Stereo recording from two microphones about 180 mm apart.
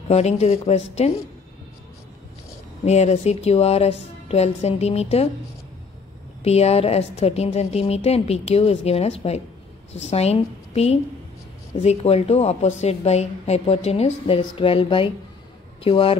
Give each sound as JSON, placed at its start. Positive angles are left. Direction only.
{"t": 0.1, "sound": "a woman's voice", "side_deg": 35}
{"t": 2.8, "sound": "a woman's voice", "side_deg": 35}
{"t": 6.4, "sound": "a woman's voice", "side_deg": 35}